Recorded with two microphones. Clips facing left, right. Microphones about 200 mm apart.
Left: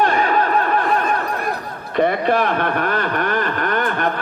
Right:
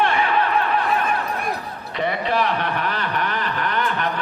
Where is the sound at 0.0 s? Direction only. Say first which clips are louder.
Left 3 dB; 40° left (ahead or behind).